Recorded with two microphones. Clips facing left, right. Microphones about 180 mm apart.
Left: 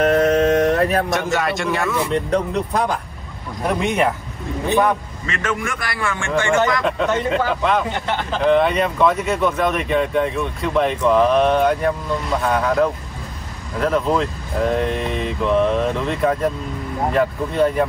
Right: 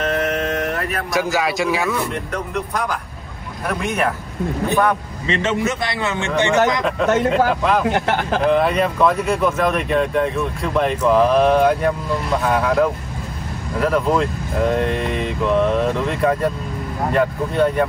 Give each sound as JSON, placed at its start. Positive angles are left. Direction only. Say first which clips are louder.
{"t": 0.0, "sound": "a sound", "louder": "left 6 dB", "side_deg": 40}
{"t": 1.1, "sound": "speech", "louder": "right 1 dB", "side_deg": 0}
{"t": 2.3, "sound": "speech", "louder": "left 4 dB", "side_deg": 30}
{"t": 3.6, "sound": "speech", "louder": "left 2 dB", "side_deg": 20}
{"t": 5.2, "sound": "a man's voice", "louder": "right 8 dB", "side_deg": -25}
{"t": 7.0, "sound": "speech", "louder": "right 7 dB", "side_deg": 0}